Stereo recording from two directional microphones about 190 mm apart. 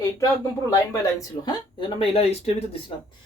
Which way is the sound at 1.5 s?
25° left (ahead or behind).